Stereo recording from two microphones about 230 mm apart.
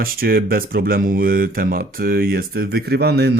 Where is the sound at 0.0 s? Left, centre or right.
Right.